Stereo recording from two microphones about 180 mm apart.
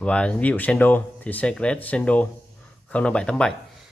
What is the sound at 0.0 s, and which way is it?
Speech, 5° left (ahead or behind).